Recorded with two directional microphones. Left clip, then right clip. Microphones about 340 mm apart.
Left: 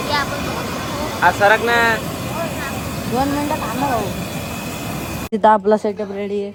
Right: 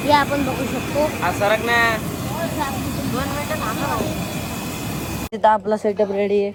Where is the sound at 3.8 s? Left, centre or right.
Centre.